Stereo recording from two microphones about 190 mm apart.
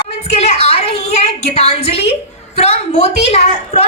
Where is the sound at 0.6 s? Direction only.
35° left (ahead or behind).